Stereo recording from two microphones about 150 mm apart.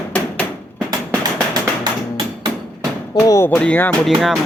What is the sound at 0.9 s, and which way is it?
Tap, 25° right (ahead or behind).